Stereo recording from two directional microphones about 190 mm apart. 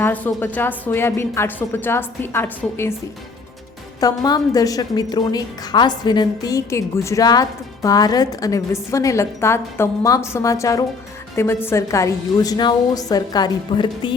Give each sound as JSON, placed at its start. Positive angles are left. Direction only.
{"t": 0.0, "sound": "a woman's voice", "side_deg": 10}
{"t": 4.0, "sound": "a woman's voice", "side_deg": 20}